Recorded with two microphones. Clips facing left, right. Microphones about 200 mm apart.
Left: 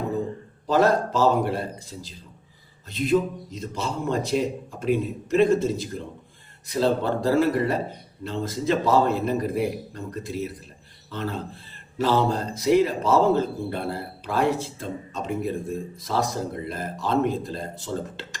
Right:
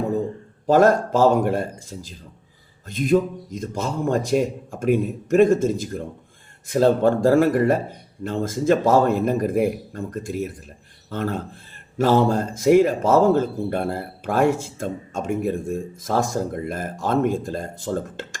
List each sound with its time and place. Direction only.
0.7 s speech: 50° right (ahead or behind)